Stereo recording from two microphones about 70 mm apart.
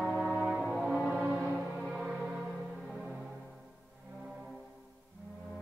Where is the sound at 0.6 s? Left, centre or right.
Centre.